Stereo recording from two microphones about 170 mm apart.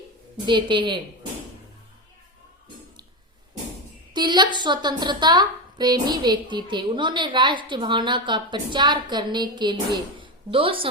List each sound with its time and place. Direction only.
0.4 s a woman's voice: 30° right (ahead or behind)
4.1 s a woman's voice: 25° right (ahead or behind)